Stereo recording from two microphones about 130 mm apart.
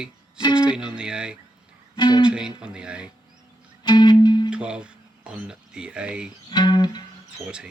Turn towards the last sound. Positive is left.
turn(degrees=30)  # may be behind; listen again after turning